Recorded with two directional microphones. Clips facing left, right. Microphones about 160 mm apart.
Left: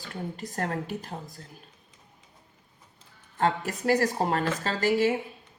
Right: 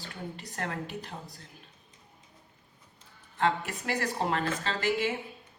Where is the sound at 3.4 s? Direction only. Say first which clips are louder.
Left 2 dB; 40° left (ahead or behind).